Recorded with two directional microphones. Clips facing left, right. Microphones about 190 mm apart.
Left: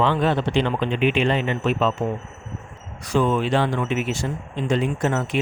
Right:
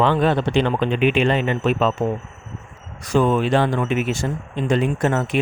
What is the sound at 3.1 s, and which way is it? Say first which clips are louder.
Speech: right 3 dB; 50° right (ahead or behind).